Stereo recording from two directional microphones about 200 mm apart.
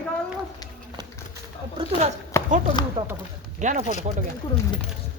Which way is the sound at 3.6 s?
40° right (ahead or behind).